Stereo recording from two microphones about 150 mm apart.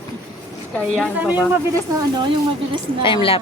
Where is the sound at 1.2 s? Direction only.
10° right (ahead or behind).